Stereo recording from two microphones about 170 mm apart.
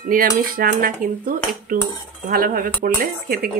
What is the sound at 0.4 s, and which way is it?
Speech, 60° right (ahead or behind).